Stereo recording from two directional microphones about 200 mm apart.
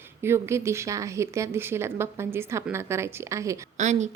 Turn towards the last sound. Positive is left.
turn(degrees=-35)  # may be behind; listen again after turning